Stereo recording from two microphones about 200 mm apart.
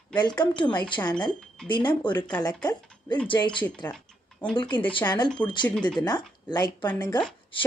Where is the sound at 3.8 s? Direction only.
5° left (ahead or behind).